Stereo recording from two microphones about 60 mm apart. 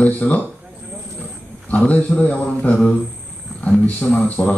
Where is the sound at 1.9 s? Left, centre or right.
Left.